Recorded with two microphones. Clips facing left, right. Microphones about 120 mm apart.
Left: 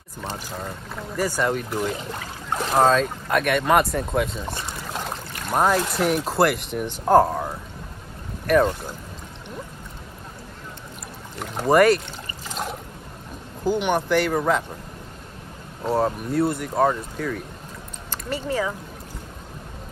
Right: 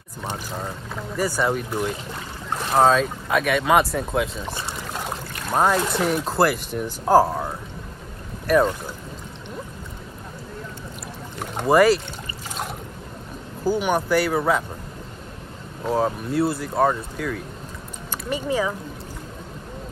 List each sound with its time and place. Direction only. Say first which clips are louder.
0.2 s speech: right 2 dB; 10° right (ahead or behind)
11.5 s speech: even; centre (ahead or behind)
13.7 s speech: even; 5° right (ahead or behind)
15.8 s speech: even; centre (ahead or behind)
18.1 s speech: right 2 dB; 15° right (ahead or behind)